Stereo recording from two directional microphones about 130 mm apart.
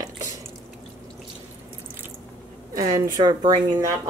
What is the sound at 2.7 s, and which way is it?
Speech, 30° right (ahead or behind).